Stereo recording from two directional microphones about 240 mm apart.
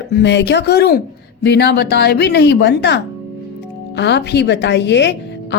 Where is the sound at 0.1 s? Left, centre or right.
Left.